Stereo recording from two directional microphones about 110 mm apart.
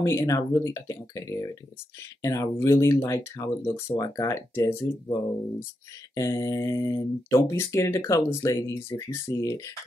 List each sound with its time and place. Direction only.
0.0 s speech: 25° left (ahead or behind)
6.1 s speech: 30° left (ahead or behind)